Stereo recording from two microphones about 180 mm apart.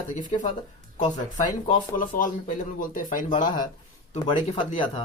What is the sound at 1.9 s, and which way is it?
Speech, 50° left (ahead or behind).